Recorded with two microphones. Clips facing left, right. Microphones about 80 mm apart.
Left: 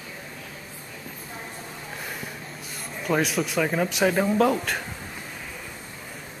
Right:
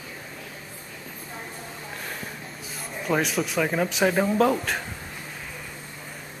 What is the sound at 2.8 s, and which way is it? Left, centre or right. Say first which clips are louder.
Speech: left 1 dB; centre.